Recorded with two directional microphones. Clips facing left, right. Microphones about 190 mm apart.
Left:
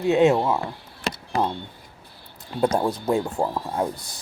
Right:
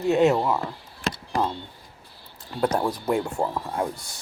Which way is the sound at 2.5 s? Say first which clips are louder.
Left 2 dB; 20° left (ahead or behind).